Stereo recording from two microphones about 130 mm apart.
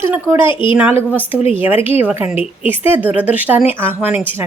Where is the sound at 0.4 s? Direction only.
40° left (ahead or behind).